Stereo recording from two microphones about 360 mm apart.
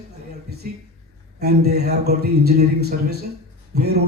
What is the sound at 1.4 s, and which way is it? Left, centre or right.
A man's voice, right.